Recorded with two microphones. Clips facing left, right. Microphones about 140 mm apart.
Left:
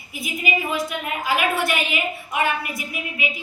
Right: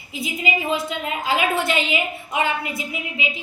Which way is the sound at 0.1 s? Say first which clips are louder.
Right 1 dB; 25° right (ahead or behind).